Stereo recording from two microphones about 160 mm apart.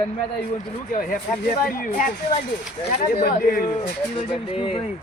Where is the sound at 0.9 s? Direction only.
60° left (ahead or behind).